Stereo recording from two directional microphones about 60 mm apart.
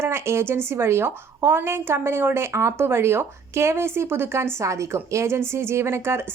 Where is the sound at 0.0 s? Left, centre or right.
Right.